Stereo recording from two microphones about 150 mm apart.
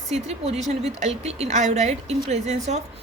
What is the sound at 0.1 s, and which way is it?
A woman's voice, 45° right (ahead or behind).